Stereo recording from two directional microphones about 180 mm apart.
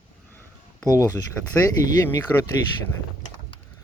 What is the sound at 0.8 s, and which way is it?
Speech, 20° left (ahead or behind).